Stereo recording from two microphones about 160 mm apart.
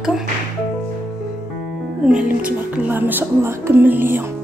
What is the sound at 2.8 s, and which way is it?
Speech, 10° right (ahead or behind).